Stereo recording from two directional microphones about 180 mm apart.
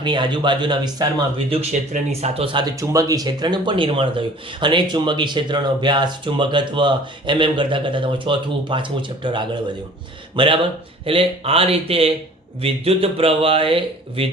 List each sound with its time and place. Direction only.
0.0 s speech: 25° right (ahead or behind)
2.7 s speech: 15° right (ahead or behind)